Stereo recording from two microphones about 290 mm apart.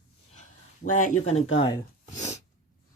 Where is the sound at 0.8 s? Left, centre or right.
Left.